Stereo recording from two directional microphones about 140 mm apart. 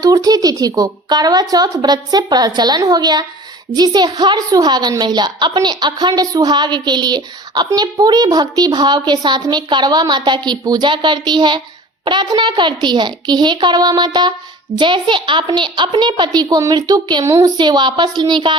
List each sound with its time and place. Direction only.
0.0 s a woman's voice: 25° right (ahead or behind)